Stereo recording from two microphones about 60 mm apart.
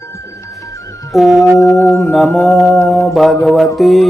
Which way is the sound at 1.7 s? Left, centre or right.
Left.